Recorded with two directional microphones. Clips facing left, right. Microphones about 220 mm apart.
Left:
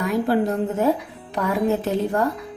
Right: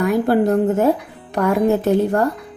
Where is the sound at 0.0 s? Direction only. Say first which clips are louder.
Right 4 dB; 55° right (ahead or behind).